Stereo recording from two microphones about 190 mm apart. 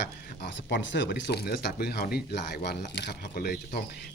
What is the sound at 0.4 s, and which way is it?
Speech, 70° left (ahead or behind).